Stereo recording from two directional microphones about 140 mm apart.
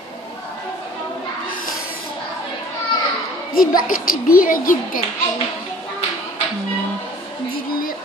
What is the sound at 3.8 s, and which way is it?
A child's voice, 90° left.